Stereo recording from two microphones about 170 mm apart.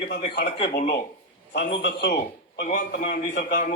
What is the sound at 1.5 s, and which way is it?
Speech, 85° left.